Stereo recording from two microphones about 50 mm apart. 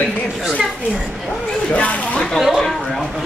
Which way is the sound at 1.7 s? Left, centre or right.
Left.